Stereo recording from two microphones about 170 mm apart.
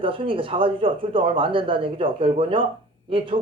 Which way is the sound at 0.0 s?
30° right (ahead or behind).